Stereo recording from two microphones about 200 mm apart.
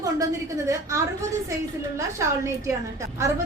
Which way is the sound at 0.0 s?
15° right (ahead or behind).